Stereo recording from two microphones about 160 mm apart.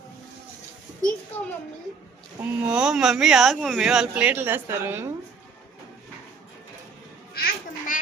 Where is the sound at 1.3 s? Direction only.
10° left (ahead or behind).